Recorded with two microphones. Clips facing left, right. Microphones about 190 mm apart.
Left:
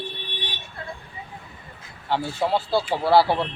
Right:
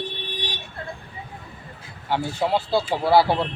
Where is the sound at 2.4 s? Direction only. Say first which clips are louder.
Right 1 dB; centre (ahead or behind).